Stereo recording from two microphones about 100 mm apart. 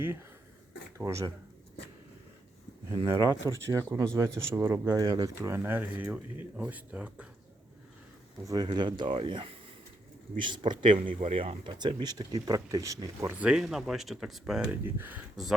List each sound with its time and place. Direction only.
0.9 s speech: 30° right (ahead or behind)
3.1 s speech: 30° right (ahead or behind)
5.0 s speech: 40° right (ahead or behind)
5.5 s speech: 20° right (ahead or behind)
8.4 s speech: 45° right (ahead or behind); by 11.7 s 70° right (ahead or behind)
11.8 s speech: 50° right (ahead or behind); by 13.3 s 35° right (ahead or behind)
13.4 s speech: 5° right (ahead or behind)
14.7 s speech: 20° right (ahead or behind)